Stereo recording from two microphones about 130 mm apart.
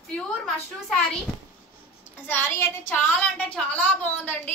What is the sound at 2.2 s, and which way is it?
A woman's voice, 15° left (ahead or behind).